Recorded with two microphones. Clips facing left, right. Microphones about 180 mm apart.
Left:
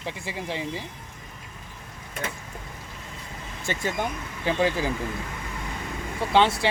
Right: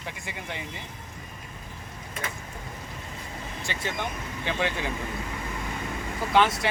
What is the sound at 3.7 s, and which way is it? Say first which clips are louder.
Speech: left 6 dB; 45° left (ahead or behind).